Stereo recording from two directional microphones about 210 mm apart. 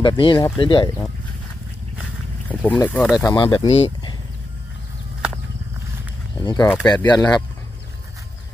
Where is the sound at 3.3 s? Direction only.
20° left (ahead or behind).